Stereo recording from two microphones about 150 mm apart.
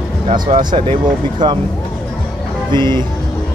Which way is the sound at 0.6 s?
30° right (ahead or behind).